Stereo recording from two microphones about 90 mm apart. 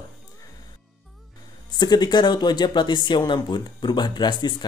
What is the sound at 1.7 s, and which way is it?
Speech, 50° left (ahead or behind).